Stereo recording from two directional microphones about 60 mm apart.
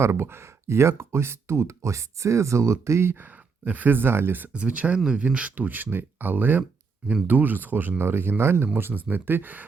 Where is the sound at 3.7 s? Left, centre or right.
Right.